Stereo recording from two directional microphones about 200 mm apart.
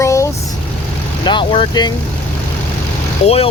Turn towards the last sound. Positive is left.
turn(degrees=30)  # may be behind; listen again after turning